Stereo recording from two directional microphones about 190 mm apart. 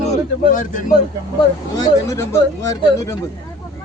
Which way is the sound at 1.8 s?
15° left (ahead or behind).